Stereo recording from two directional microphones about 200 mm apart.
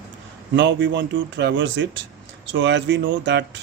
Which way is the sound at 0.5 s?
65° right (ahead or behind).